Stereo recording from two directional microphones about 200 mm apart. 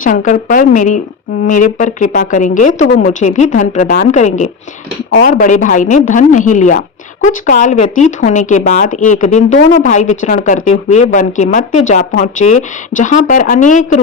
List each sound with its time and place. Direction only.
0.0 s speech: 40° left (ahead or behind)